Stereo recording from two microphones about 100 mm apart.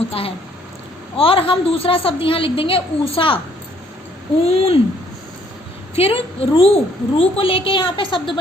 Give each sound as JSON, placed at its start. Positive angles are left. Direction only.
{"t": 0.1, "sound": "a woman's voice", "side_deg": 75}
{"t": 4.4, "sound": "speech", "side_deg": 80}
{"t": 6.0, "sound": "a woman's voice", "side_deg": 75}